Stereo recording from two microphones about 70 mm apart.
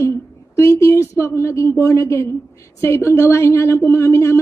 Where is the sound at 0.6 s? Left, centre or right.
Left.